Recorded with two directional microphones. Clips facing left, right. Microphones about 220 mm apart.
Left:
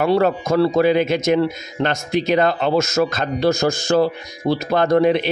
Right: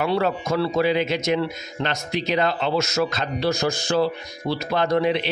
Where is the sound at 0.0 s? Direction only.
45° left (ahead or behind).